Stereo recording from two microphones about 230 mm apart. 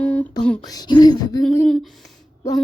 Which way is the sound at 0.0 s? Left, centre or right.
Centre.